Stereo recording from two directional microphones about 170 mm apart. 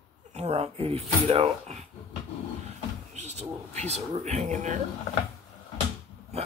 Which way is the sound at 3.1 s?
40° right (ahead or behind).